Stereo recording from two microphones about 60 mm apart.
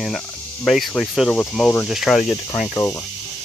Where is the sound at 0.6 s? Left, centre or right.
Centre.